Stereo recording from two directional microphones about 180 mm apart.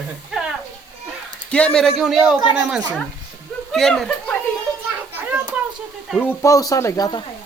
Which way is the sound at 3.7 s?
Centre (ahead or behind).